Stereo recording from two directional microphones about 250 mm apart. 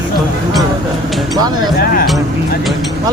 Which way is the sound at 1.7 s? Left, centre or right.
Left.